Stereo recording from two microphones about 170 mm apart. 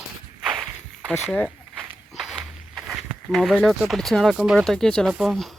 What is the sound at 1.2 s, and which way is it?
Walk, centre (ahead or behind).